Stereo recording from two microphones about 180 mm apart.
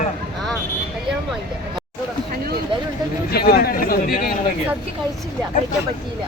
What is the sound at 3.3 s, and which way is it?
Speech, 60° left (ahead or behind).